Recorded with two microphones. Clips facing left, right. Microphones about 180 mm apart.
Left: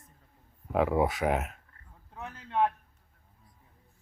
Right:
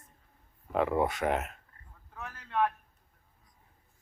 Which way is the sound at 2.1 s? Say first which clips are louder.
Left 2 dB; 20° left (ahead or behind).